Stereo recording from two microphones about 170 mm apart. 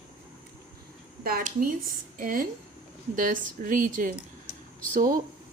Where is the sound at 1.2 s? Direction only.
55° right (ahead or behind).